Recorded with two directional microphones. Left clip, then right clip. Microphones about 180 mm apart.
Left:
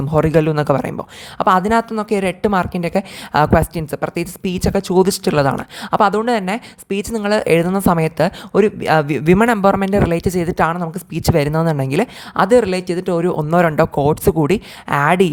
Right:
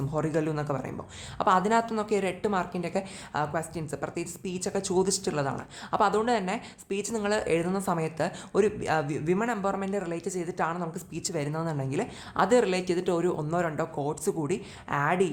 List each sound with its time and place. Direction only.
0.1 s speech: 45° left (ahead or behind)